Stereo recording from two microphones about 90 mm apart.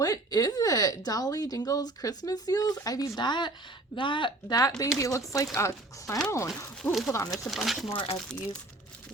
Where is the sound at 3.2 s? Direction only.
55° left (ahead or behind).